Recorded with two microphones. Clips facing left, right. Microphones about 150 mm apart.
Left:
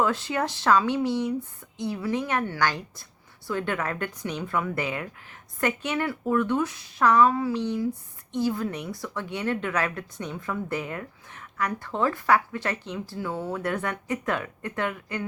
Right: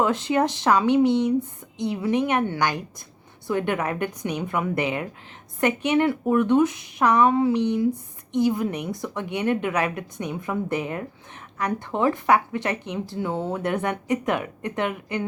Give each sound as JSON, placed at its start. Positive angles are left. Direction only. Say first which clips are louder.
{"t": 0.0, "sound": "speech", "louder": "right 4 dB", "side_deg": -20}